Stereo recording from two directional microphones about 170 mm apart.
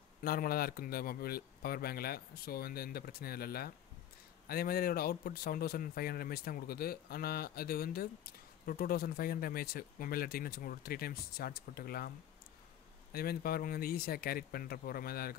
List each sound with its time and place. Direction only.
0.2 s speech: 60° left (ahead or behind)
13.1 s speech: 60° left (ahead or behind)